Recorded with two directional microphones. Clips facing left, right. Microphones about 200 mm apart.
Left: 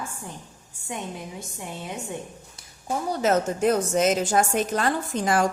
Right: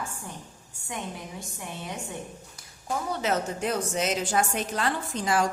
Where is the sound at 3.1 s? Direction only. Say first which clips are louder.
Left 6 dB; 45° left (ahead or behind).